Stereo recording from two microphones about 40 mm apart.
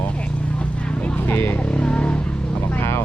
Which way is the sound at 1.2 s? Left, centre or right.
Left.